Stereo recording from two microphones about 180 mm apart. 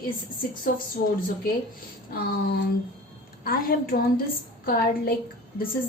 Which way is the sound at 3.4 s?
55° left (ahead or behind).